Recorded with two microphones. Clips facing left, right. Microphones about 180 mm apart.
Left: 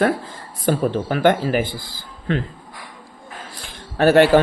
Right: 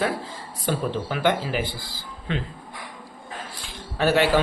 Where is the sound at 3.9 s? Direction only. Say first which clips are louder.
Left 7 dB; 50° left (ahead or behind).